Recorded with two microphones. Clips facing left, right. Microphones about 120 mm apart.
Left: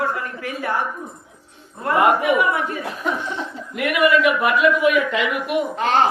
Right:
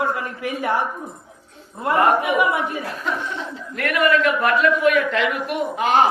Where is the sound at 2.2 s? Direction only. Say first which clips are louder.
Left 1 dB; 15° right (ahead or behind).